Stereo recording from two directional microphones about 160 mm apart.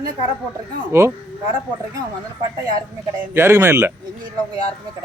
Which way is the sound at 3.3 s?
15° right (ahead or behind).